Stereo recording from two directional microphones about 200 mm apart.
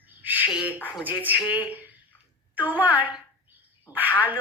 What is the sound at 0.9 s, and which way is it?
Speech, 10° right (ahead or behind).